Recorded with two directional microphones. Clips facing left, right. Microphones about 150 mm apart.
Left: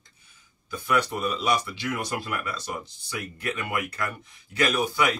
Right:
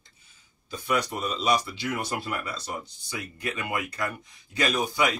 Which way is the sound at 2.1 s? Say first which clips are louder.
Left 1 dB; 25° right (ahead or behind).